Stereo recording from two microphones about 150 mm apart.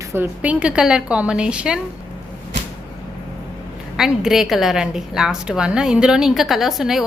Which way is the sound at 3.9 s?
5° right (ahead or behind).